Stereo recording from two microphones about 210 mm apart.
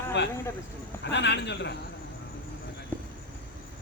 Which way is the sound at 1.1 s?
55° left (ahead or behind).